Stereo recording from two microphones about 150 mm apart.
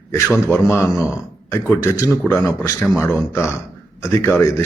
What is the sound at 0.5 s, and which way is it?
A man's voice, 15° left (ahead or behind).